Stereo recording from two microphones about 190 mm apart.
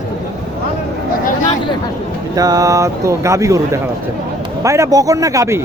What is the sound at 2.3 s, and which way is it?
Speech, 20° right (ahead or behind).